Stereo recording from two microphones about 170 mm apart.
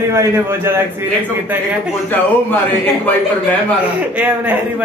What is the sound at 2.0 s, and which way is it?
Speech, 10° left (ahead or behind).